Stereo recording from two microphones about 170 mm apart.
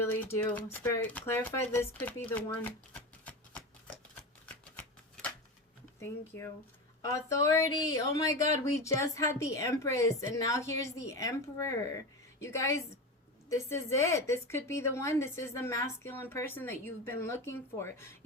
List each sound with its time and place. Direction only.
0.0 s a woman's voice: 10° left (ahead or behind)
4.4 s a sound: 5° left (ahead or behind)
6.0 s a woman's voice: 15° left (ahead or behind)